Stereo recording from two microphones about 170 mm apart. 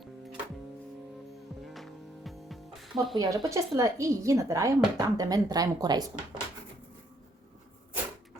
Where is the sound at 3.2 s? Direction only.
20° right (ahead or behind).